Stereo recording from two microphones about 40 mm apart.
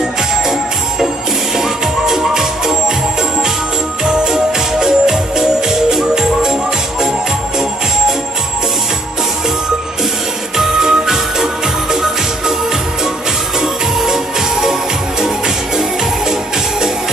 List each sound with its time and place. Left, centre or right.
0.5 s music: centre
4.0 s music: centre
10.6 s music: centre
13.6 s music: centre